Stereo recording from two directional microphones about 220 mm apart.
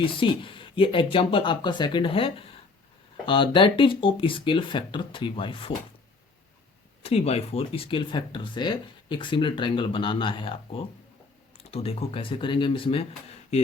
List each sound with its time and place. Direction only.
0.0 s speech: 25° left (ahead or behind)
7.0 s speech: 30° left (ahead or behind)